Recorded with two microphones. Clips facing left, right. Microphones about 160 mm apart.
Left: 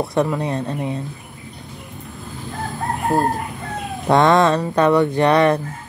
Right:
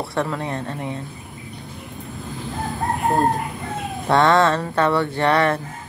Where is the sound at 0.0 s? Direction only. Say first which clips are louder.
Left 5 dB; 20° left (ahead or behind).